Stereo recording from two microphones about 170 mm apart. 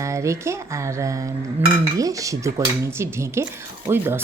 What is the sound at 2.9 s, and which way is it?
Speech, 15° right (ahead or behind).